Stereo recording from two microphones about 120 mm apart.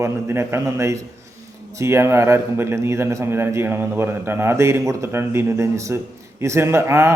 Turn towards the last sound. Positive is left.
turn(degrees=-25)  # may be behind; listen again after turning